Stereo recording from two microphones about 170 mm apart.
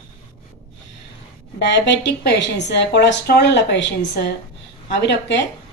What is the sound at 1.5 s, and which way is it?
A woman's voice, 90° left.